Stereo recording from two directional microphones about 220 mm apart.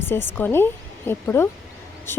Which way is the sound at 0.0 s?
10° left (ahead or behind).